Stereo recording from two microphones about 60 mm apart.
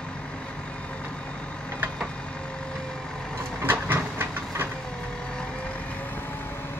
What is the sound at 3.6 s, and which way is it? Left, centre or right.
Vehicle, right.